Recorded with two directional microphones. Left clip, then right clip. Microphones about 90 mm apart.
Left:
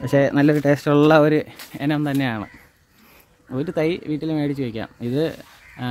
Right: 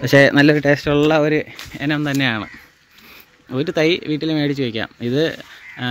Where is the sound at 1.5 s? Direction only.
25° left (ahead or behind).